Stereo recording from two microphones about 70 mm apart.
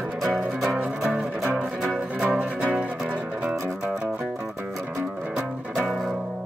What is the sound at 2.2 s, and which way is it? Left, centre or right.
Music, centre.